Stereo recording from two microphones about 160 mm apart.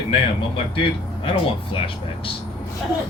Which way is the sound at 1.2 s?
35° left (ahead or behind).